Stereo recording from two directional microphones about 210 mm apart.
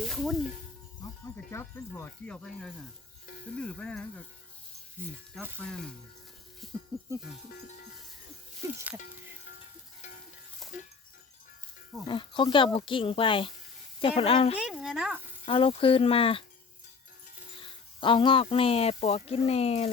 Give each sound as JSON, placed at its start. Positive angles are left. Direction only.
{"t": 0.0, "sound": "music", "side_deg": 0}
{"t": 1.0, "sound": "speech", "side_deg": 15}
{"t": 5.0, "sound": "speech", "side_deg": -10}
{"t": 5.6, "sound": "speech", "side_deg": 5}
{"t": 10.6, "sound": "chink", "side_deg": 0}
{"t": 12.0, "sound": "speech", "side_deg": 20}
{"t": 14.6, "sound": "speech", "side_deg": 0}
{"t": 15.4, "sound": "speech", "side_deg": 25}
{"t": 17.6, "sound": "speech", "side_deg": 25}